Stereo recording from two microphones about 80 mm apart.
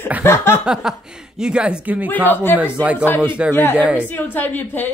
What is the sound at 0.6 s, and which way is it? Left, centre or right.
Speech, centre.